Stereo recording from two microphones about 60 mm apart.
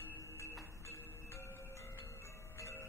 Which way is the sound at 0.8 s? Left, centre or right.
Left.